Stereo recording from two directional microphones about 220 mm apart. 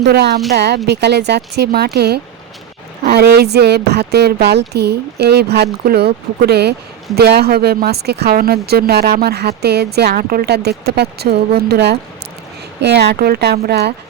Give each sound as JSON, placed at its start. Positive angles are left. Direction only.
{"t": 0.0, "sound": "speech", "side_deg": -50}